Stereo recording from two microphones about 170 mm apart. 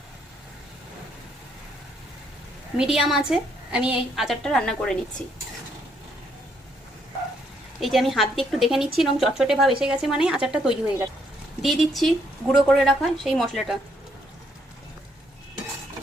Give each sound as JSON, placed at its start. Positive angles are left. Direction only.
{"t": 2.7, "sound": "a woman's voice", "side_deg": -5}
{"t": 7.8, "sound": "a woman's voice", "side_deg": 0}